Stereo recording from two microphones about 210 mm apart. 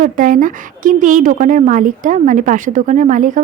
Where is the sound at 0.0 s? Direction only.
40° right (ahead or behind).